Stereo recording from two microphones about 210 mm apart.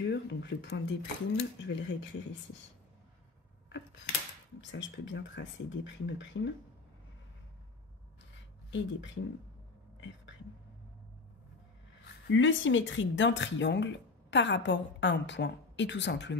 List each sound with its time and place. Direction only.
0.0 s speech: 55° left (ahead or behind)
4.6 s speech: 60° left (ahead or behind)
8.6 s speech: 60° left (ahead or behind)
12.3 s speech: 65° left (ahead or behind)